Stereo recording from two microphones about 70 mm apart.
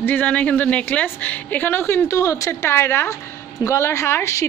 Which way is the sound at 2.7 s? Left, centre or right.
Left.